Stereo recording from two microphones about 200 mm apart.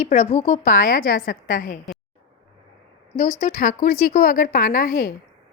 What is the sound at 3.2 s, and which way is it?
A woman's voice, 45° left (ahead or behind).